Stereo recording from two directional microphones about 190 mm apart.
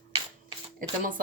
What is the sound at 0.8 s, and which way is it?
Speech, 45° right (ahead or behind).